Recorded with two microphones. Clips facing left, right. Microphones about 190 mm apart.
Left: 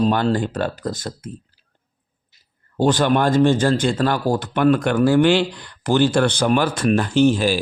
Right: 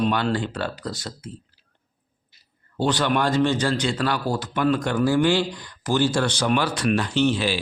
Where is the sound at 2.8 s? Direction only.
45° left (ahead or behind).